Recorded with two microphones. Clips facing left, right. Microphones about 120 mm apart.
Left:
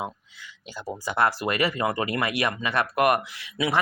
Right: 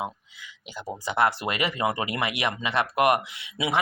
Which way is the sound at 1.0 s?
20° right (ahead or behind).